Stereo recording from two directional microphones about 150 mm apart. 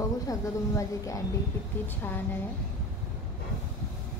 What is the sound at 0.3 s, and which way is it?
Speech, 20° left (ahead or behind).